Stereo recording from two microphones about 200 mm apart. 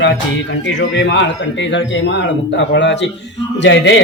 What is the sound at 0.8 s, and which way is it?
Speech, 60° left (ahead or behind).